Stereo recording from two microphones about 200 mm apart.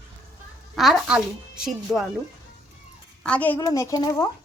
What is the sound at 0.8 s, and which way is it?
A child's voice, 5° right (ahead or behind).